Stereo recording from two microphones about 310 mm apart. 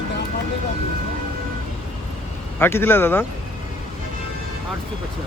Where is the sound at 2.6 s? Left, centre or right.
Centre.